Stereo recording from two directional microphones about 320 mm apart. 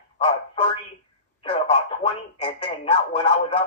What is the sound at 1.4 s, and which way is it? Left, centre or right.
Speech, centre.